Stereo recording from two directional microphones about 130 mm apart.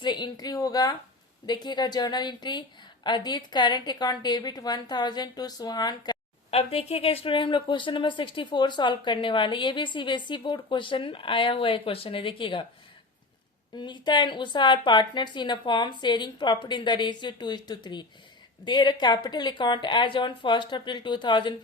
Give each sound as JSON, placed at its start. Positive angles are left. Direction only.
{"t": 0.0, "sound": "speech", "side_deg": 35}
{"t": 6.5, "sound": "speech", "side_deg": 50}
{"t": 13.7, "sound": "speech", "side_deg": 35}